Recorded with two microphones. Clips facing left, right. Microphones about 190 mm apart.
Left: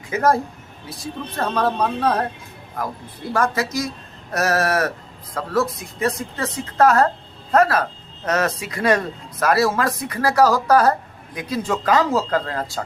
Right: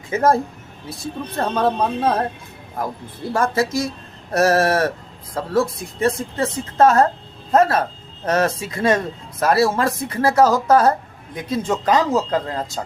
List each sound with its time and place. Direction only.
0.1 s speech: 25° right (ahead or behind)
3.3 s speech: 30° right (ahead or behind)